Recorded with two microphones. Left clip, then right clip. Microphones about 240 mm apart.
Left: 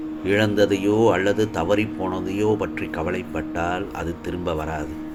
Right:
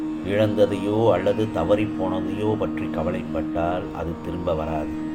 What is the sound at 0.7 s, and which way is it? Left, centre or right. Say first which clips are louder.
A man's voice: left 2 dB; left.